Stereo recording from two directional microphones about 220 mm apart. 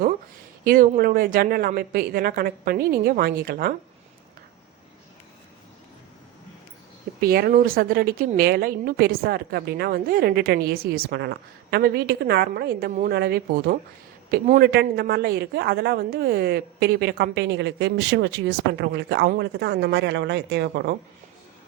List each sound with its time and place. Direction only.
0.6 s a woman's voice: 40° right (ahead or behind)
7.2 s a woman's voice: 45° right (ahead or behind)